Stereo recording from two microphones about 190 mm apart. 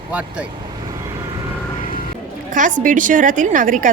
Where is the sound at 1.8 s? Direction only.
45° left (ahead or behind).